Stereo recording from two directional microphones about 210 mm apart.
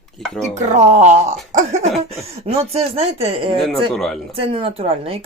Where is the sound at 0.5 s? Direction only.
35° right (ahead or behind).